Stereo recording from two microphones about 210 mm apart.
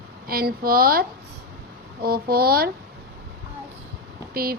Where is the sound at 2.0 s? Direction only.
45° right (ahead or behind).